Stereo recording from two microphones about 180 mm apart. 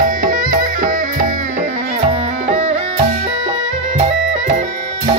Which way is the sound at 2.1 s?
35° right (ahead or behind).